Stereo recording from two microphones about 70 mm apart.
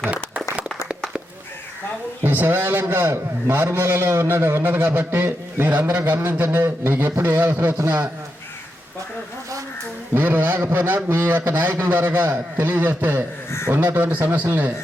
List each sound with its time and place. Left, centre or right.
2.2 s a man's voice: right
5.7 s a man's voice: right
6.0 s a man's voice: right
10.2 s a man's voice: right